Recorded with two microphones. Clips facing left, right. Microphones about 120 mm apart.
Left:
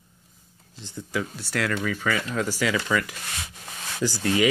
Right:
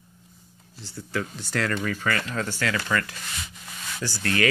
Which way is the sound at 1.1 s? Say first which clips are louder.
Even; 5° left (ahead or behind).